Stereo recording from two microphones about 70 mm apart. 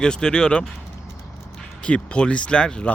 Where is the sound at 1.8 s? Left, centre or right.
Centre.